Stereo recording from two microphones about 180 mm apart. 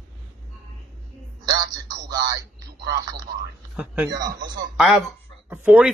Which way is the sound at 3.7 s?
10° right (ahead or behind).